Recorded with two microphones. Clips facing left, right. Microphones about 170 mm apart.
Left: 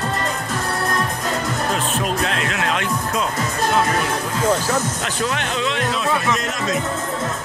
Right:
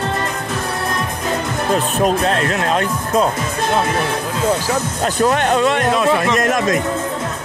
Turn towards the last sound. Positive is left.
turn(degrees=-55)  # may be behind; listen again after turning